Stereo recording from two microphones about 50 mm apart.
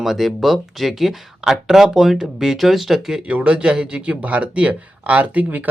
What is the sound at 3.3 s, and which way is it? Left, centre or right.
Speech, right.